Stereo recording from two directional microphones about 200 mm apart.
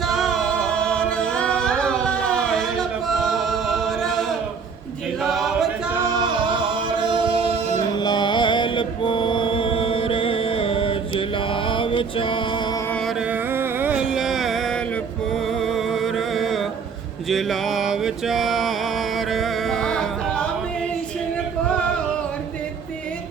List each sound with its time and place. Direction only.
0.0 s music: centre (ahead or behind)
5.2 s a capella: centre (ahead or behind)
6.1 s singing: 25° right (ahead or behind)
7.9 s mantra: 20° left (ahead or behind)
11.7 s music: 25° left (ahead or behind)
13.3 s carnatic music: 10° right (ahead or behind)
15.3 s music: centre (ahead or behind)
17.2 s mantra: centre (ahead or behind)